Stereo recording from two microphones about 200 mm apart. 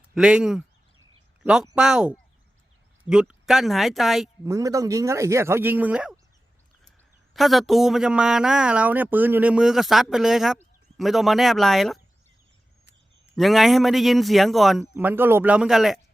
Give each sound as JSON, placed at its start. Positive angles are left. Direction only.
{"t": 0.1, "sound": "speech", "side_deg": -5}
{"t": 4.4, "sound": "speech", "side_deg": -15}
{"t": 7.3, "sound": "speech", "side_deg": 0}
{"t": 13.2, "sound": "speech", "side_deg": 0}